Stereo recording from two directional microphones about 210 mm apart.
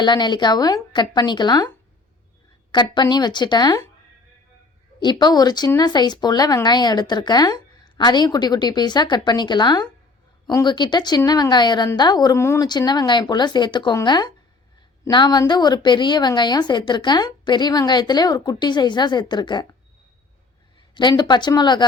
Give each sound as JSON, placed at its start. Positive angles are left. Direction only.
{"t": 0.0, "sound": "speech", "side_deg": 20}
{"t": 2.7, "sound": "speech", "side_deg": 20}
{"t": 4.9, "sound": "speech", "side_deg": 20}
{"t": 20.9, "sound": "speech", "side_deg": 20}